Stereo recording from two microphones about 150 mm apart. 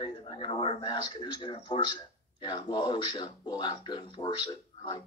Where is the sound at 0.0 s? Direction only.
30° left (ahead or behind).